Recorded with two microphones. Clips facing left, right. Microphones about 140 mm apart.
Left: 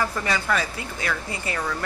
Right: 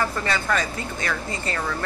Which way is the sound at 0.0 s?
10° left (ahead or behind).